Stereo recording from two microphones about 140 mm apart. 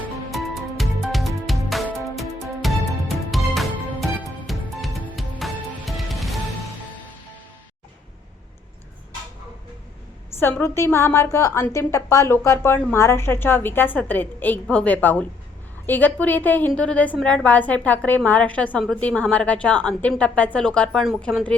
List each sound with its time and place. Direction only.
0.3 s music: centre (ahead or behind)
10.4 s a woman's voice: 15° left (ahead or behind)